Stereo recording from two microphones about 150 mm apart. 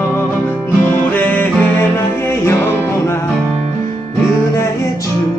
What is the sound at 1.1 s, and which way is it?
Music, 10° left (ahead or behind).